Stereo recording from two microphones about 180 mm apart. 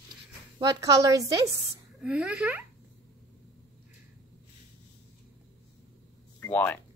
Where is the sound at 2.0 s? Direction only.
5° right (ahead or behind).